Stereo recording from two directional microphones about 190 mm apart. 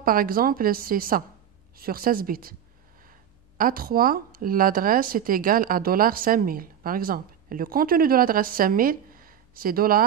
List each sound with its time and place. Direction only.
0.0 s speech: 50° right (ahead or behind)
3.5 s speech: 50° right (ahead or behind)